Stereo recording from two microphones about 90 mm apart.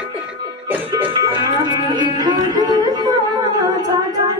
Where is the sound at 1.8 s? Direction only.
55° right (ahead or behind).